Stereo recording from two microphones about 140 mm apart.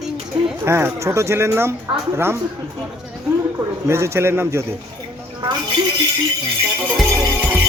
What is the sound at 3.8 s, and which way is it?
Speech, 20° right (ahead or behind).